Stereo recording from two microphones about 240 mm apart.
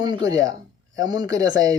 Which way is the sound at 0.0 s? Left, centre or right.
Centre.